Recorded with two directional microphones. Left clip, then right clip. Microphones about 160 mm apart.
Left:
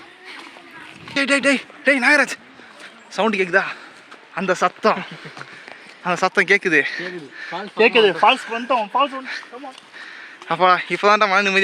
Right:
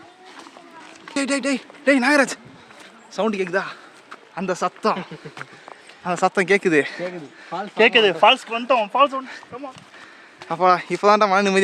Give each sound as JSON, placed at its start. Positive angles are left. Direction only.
{"t": 1.3, "sound": "speech", "side_deg": 5}
{"t": 6.1, "sound": "speech", "side_deg": -20}
{"t": 10.4, "sound": "speech", "side_deg": -5}